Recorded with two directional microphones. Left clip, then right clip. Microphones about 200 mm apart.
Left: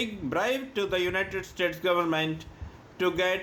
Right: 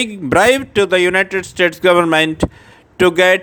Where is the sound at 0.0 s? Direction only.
50° right (ahead or behind).